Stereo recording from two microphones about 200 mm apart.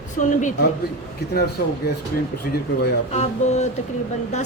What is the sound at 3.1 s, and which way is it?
Speech, 35° left (ahead or behind).